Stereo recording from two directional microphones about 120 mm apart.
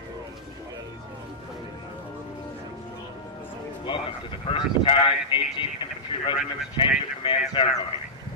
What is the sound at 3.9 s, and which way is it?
Speech, 45° left (ahead or behind).